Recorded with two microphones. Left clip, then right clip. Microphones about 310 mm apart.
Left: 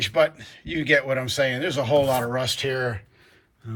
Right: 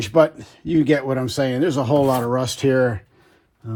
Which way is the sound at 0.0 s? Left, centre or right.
Centre.